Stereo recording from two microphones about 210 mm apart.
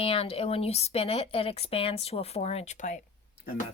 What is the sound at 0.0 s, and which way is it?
A woman's voice, 25° left (ahead or behind).